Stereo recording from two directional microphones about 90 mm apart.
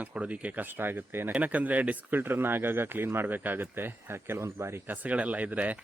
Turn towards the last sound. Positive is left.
turn(degrees=-15)  # may be behind; listen again after turning